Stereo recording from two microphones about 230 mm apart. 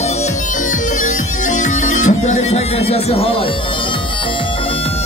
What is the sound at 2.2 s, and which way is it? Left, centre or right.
Music, left.